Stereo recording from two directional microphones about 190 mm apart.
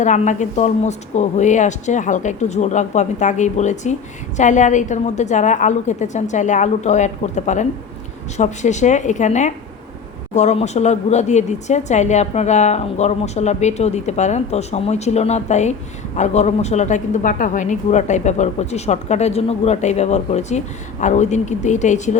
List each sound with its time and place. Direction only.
0.0 s speech: 40° left (ahead or behind)